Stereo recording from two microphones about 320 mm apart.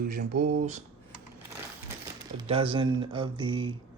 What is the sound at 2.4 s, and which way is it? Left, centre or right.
Speech, centre.